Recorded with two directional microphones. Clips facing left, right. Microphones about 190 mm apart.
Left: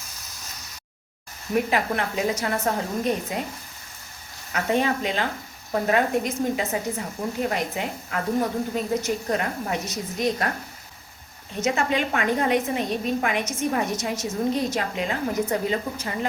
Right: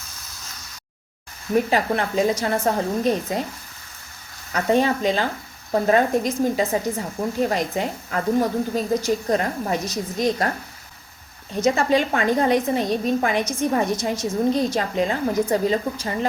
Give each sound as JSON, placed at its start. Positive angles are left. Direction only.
{"t": 1.5, "sound": "a woman's voice", "side_deg": -30}
{"t": 4.5, "sound": "a woman's voice", "side_deg": -35}
{"t": 11.5, "sound": "a woman's voice", "side_deg": -35}